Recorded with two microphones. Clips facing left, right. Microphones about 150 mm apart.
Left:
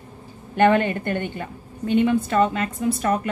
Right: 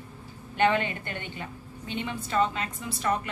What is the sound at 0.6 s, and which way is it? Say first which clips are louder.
A woman's voice: left 7 dB; 50° left (ahead or behind).